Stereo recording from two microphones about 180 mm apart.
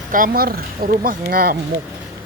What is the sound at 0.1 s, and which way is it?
Speech, 50° right (ahead or behind).